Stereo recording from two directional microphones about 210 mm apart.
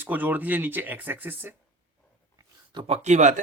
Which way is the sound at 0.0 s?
10° right (ahead or behind).